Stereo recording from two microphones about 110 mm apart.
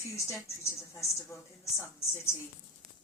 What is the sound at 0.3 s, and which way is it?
Speech, 25° left (ahead or behind).